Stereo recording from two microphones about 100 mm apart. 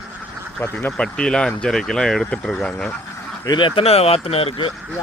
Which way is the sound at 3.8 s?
90° left.